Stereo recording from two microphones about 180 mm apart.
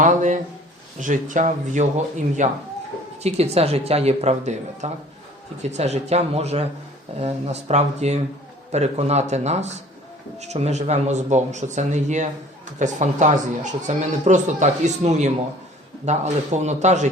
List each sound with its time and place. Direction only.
0.0 s speech: 45° right (ahead or behind)